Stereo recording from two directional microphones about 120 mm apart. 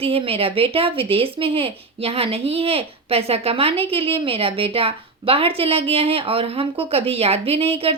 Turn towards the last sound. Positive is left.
turn(degrees=-55)  # may be behind; listen again after turning